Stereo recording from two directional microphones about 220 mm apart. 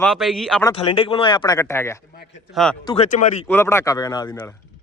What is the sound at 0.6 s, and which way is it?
Speech, 25° left (ahead or behind).